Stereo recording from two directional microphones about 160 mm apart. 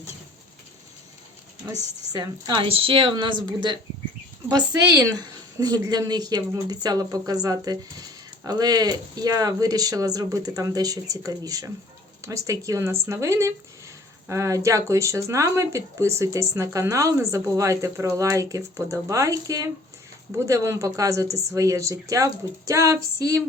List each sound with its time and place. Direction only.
1.6 s a woman's voice: 20° right (ahead or behind)